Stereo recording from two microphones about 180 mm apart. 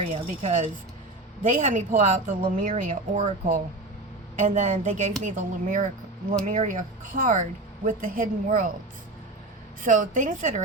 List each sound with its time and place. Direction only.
0.1 s a woman's voice: 40° right (ahead or behind)
9.8 s a woman's voice: 45° right (ahead or behind)